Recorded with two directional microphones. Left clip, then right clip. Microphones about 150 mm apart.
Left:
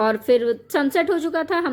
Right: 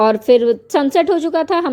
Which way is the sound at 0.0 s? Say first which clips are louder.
Right 6 dB; 30° right (ahead or behind).